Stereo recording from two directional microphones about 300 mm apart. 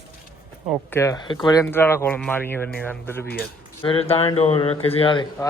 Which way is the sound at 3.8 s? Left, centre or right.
Centre.